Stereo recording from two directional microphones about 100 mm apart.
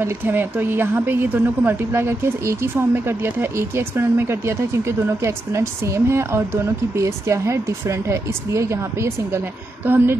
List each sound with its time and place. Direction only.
0.0 s a woman's voice: 20° right (ahead or behind)